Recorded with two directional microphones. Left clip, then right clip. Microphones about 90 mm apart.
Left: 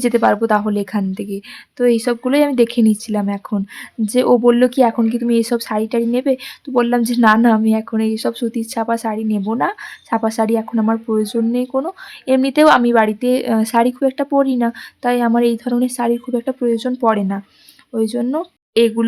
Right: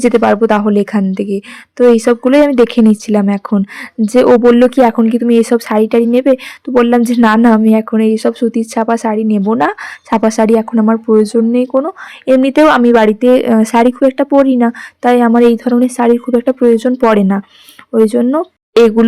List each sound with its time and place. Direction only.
0.0 s a woman's voice: 30° right (ahead or behind)
4.1 s a woman's voice: 30° right (ahead or behind); by 18.2 s 45° right (ahead or behind)
18.2 s speech: 30° right (ahead or behind)
18.7 s speech: 45° right (ahead or behind)